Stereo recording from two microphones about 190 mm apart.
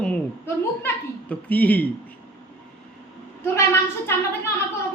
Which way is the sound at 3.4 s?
15° left (ahead or behind).